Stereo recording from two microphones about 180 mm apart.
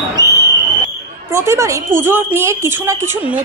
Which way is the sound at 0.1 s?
15° left (ahead or behind).